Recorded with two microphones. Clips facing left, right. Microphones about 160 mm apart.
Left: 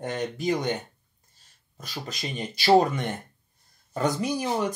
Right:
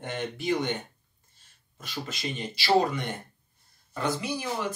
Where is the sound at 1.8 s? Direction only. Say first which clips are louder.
Even; 45° left (ahead or behind).